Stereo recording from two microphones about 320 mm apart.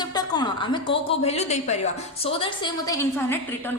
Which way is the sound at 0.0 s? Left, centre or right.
Centre.